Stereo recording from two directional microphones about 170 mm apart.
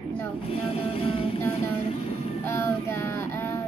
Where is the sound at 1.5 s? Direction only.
35° left (ahead or behind).